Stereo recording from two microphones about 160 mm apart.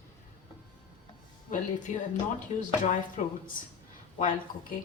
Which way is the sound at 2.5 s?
55° left (ahead or behind).